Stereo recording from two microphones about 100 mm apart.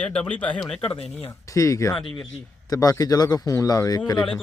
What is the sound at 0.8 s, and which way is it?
Speech, 70° left (ahead or behind).